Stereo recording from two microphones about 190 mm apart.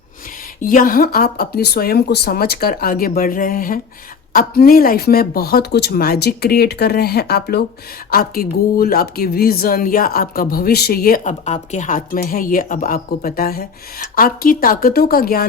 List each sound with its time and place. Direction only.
0.6 s speech: 45° left (ahead or behind)